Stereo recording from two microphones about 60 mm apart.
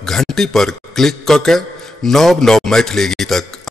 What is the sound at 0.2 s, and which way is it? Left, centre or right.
A man's voice, centre.